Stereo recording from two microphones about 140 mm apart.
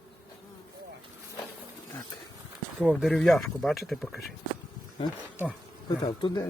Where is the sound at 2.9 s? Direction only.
5° left (ahead or behind).